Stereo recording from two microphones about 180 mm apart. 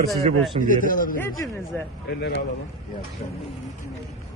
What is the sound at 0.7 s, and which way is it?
Speech, 50° left (ahead or behind).